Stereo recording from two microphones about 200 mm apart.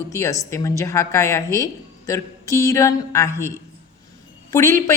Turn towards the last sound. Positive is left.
turn(degrees=15)  # may be behind; listen again after turning